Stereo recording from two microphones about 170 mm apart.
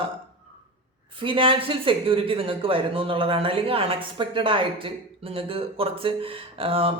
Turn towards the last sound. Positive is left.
turn(degrees=-35)  # may be behind; listen again after turning